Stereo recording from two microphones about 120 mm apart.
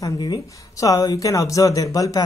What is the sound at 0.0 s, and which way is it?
Speech, 35° left (ahead or behind).